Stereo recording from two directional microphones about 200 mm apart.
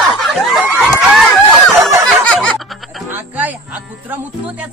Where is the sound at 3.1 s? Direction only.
10° right (ahead or behind).